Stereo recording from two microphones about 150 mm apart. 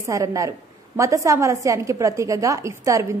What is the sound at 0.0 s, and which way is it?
A woman's voice, 20° right (ahead or behind).